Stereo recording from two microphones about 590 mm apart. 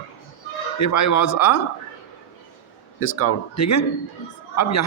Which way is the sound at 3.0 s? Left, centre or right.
Left.